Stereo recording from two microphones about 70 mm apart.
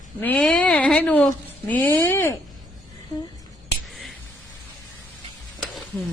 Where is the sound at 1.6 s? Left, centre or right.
Left.